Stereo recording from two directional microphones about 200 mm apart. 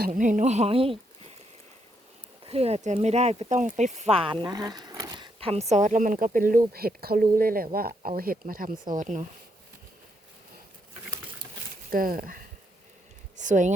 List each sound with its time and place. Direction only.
0.0 s speech: 40° right (ahead or behind)
2.5 s speech: 30° right (ahead or behind)
11.9 s speech: 45° right (ahead or behind)